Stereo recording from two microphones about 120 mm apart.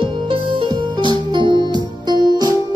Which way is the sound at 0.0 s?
45° right (ahead or behind).